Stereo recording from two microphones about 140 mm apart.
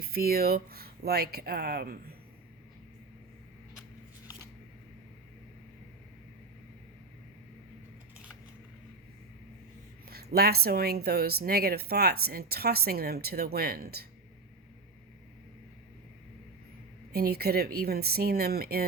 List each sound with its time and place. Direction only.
0.0 s speech: 90° right
10.1 s speech: 90° right
17.2 s speech: 90° right